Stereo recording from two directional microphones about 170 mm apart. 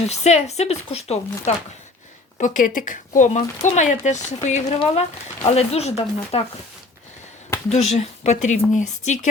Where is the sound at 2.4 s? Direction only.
50° left (ahead or behind).